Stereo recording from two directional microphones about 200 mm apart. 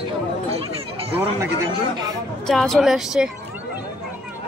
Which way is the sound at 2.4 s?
Centre (ahead or behind).